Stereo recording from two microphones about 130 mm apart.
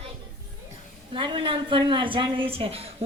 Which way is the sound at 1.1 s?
40° right (ahead or behind).